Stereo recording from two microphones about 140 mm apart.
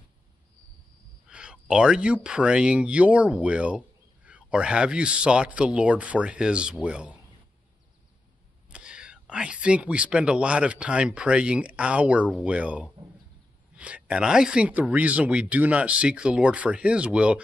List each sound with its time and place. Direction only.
1.3 s speech: 5° right (ahead or behind)
8.6 s speech: 5° right (ahead or behind)